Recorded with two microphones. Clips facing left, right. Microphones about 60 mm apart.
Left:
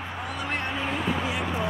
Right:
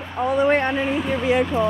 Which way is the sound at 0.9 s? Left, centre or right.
Centre.